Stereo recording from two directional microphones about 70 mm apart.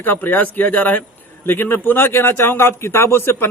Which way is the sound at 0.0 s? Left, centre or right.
Left.